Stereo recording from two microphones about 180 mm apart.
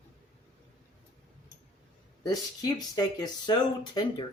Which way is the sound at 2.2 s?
20° left (ahead or behind).